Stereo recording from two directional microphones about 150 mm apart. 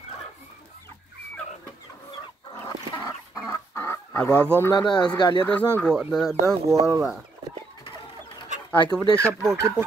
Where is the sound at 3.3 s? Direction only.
15° left (ahead or behind).